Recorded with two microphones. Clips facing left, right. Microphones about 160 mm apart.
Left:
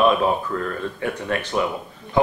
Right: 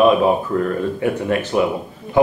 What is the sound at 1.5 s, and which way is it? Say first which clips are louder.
Speech: right 5 dB; 15° right (ahead or behind).